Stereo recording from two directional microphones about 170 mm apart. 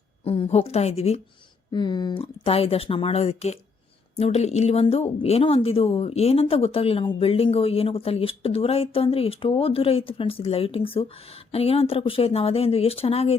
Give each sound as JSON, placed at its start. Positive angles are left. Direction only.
{"t": 0.3, "sound": "a woman's voice", "side_deg": 35}
{"t": 1.7, "sound": "a woman's voice", "side_deg": 25}